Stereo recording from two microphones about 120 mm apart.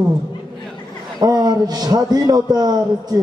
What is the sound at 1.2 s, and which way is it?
A man's voice, 35° right (ahead or behind).